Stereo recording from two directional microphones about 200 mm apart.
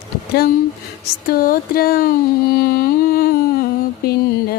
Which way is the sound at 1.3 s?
45° left (ahead or behind).